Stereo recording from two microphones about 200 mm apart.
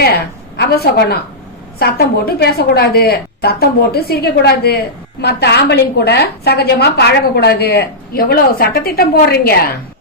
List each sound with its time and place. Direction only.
0.0 s a woman's voice: 50° left (ahead or behind)